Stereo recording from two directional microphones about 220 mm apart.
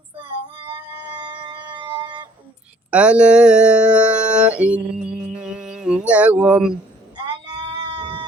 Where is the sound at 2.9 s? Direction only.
5° right (ahead or behind).